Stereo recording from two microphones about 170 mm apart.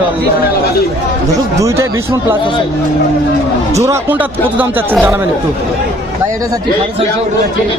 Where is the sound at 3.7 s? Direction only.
20° right (ahead or behind).